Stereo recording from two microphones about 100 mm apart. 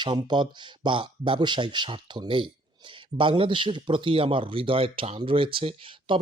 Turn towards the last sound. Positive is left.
turn(degrees=-60)  # may be behind; listen again after turning